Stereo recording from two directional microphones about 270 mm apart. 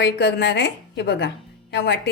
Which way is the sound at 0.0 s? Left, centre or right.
Left.